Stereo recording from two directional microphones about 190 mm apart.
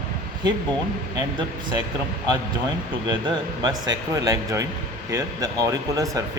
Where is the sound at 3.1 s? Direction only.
20° right (ahead or behind).